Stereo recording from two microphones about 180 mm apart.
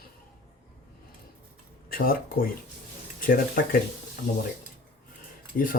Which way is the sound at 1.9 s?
55° left (ahead or behind).